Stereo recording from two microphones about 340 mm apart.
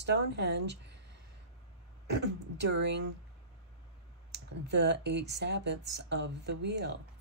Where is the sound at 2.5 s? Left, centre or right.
Right.